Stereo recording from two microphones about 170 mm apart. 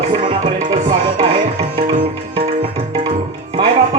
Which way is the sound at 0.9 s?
35° right (ahead or behind).